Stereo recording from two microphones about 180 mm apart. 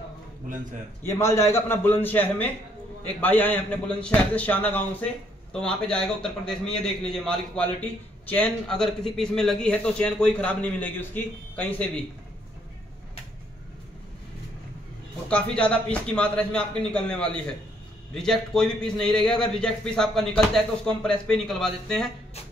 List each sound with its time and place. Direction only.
1.0 s a man's voice: 15° left (ahead or behind)
15.2 s a man's voice: 5° left (ahead or behind)